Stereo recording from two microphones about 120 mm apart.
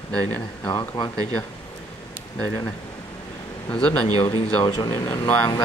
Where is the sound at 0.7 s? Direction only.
30° left (ahead or behind).